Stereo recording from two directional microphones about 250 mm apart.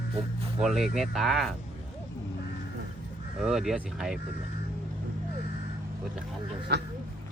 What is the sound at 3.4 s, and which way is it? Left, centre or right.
Speech, centre.